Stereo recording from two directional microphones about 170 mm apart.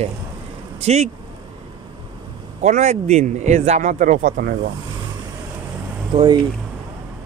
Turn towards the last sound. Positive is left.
turn(degrees=-25)  # may be behind; listen again after turning